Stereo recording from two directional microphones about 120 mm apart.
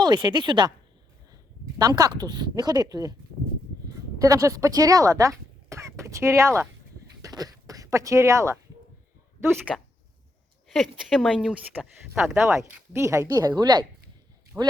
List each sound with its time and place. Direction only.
0.0 s speech: 35° right (ahead or behind)
2.0 s speech: 30° right (ahead or behind)
4.2 s speech: 30° right (ahead or behind)
10.7 s speech: centre (ahead or behind)
12.5 s a woman's voice: 20° right (ahead or behind); by 13.8 s 40° right (ahead or behind)
14.5 s speech: 10° right (ahead or behind)